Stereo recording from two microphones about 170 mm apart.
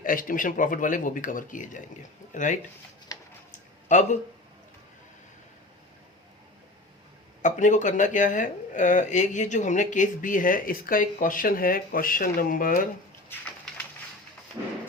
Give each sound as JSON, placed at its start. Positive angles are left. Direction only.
{"t": 0.0, "sound": "speech", "side_deg": 55}
{"t": 3.5, "sound": "a sound", "side_deg": 45}
{"t": 7.4, "sound": "speech", "side_deg": 45}